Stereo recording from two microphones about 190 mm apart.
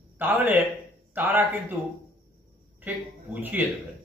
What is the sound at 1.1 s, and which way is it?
Speech, 10° right (ahead or behind).